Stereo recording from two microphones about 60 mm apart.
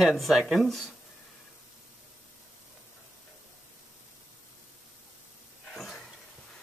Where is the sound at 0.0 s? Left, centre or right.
Centre.